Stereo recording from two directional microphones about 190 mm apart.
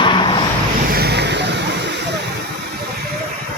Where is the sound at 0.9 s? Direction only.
55° right (ahead or behind).